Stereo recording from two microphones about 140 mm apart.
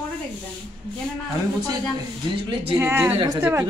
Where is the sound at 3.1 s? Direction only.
30° right (ahead or behind).